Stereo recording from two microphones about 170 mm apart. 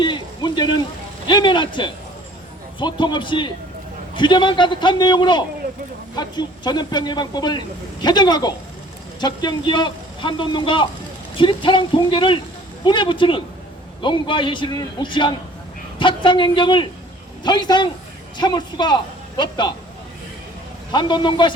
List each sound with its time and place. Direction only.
0.0 s a man's voice: 25° left (ahead or behind)
20.9 s a man's voice: 25° left (ahead or behind)